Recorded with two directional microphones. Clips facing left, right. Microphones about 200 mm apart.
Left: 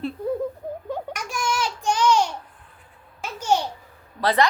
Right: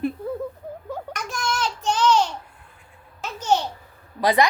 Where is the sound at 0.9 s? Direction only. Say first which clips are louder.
Right 1 dB; 10° left (ahead or behind).